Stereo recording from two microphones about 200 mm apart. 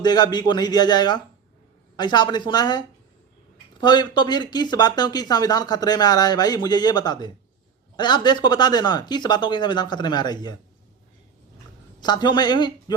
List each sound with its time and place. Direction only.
0.0 s speech: 20° left (ahead or behind)
11.9 s speech: 20° left (ahead or behind)